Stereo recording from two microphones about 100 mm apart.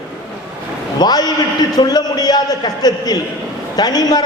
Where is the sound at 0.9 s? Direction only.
40° left (ahead or behind).